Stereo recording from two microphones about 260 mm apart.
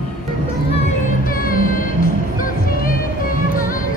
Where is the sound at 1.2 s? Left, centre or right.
Left.